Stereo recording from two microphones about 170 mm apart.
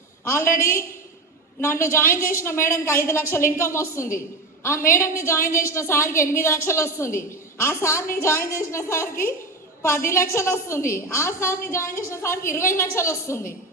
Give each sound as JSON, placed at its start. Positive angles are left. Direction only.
{"t": 0.3, "sound": "a woman's voice", "side_deg": 15}